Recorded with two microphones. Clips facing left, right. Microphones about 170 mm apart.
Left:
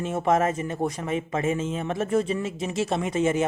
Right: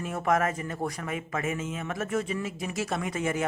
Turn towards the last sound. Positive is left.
turn(degrees=25)  # may be behind; listen again after turning